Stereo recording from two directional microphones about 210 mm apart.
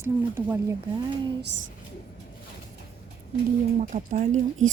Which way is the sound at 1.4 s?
60° right (ahead or behind).